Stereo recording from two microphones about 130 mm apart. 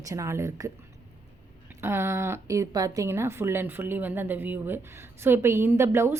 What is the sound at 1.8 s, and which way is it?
A woman's voice, 20° right (ahead or behind).